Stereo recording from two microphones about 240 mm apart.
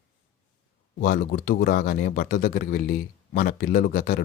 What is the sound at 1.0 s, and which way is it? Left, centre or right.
A man's voice, left.